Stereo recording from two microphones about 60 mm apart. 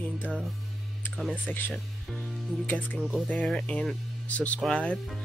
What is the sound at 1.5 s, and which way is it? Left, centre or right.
Speech, left.